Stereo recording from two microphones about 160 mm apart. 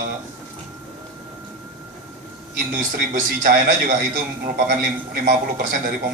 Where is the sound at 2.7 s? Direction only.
60° right (ahead or behind).